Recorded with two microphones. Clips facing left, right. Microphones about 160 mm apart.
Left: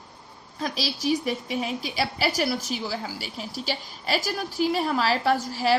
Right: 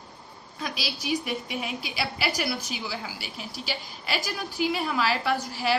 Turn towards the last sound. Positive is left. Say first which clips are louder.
# left 4 dB
turn(degrees=40)  # may be behind; listen again after turning